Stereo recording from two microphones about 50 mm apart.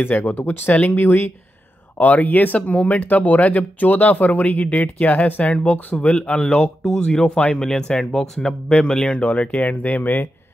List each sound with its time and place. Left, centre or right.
0.0 s speech: left
2.0 s speech: left
7.6 s speech: centre
9.0 s speech: left